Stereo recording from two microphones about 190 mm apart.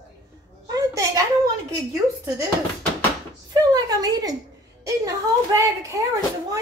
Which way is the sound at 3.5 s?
20° right (ahead or behind).